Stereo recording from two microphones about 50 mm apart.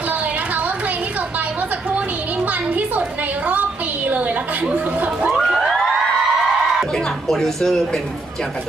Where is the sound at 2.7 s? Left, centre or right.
Right.